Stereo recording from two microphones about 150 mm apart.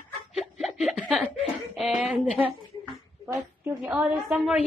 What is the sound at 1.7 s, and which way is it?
A woman's voice, centre (ahead or behind).